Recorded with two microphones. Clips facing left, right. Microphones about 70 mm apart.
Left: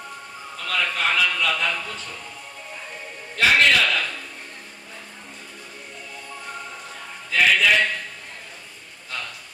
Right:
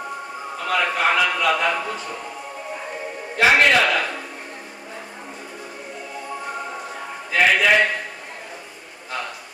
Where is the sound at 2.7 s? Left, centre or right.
Right.